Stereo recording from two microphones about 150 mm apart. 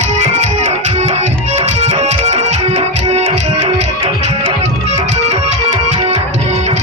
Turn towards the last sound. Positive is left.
turn(degrees=-45)  # may be behind; listen again after turning